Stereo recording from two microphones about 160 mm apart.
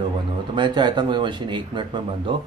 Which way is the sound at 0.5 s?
30° right (ahead or behind).